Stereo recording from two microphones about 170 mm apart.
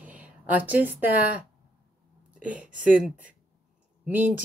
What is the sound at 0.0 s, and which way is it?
Speech, 10° right (ahead or behind).